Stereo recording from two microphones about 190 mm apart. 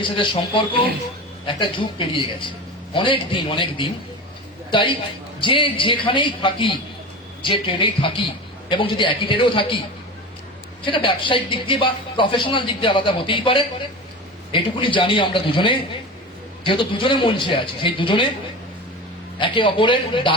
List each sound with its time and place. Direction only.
0.0 s speech: 25° left (ahead or behind)
10.8 s speech: 25° left (ahead or behind)
19.4 s speech: 25° left (ahead or behind)